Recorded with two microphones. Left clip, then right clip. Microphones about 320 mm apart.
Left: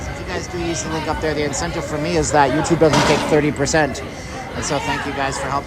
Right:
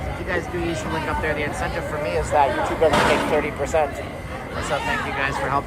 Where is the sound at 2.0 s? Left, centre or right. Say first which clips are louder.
Left 4 dB; left.